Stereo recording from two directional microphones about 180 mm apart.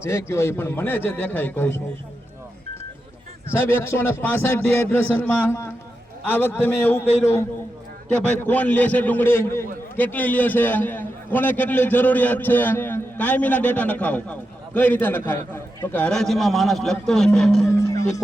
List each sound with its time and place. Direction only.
0.0 s a man's voice: 15° left (ahead or behind)
3.5 s a man's voice: 15° left (ahead or behind)
17.7 s a man's voice: 15° left (ahead or behind)